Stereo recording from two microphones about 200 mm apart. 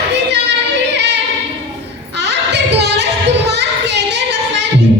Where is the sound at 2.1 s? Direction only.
60° right (ahead or behind).